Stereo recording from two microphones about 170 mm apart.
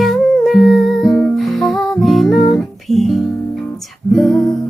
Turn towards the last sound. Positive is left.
turn(degrees=0)  # may be behind; listen again after turning